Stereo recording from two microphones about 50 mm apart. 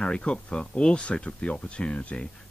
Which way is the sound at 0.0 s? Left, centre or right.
Centre.